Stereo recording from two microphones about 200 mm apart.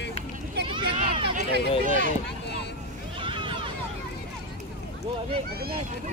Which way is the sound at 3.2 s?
25° right (ahead or behind).